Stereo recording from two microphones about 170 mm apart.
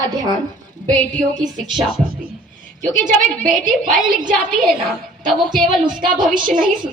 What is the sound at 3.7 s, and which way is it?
Speech, 50° right (ahead or behind).